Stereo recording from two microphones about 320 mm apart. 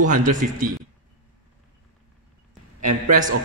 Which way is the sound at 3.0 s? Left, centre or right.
Right.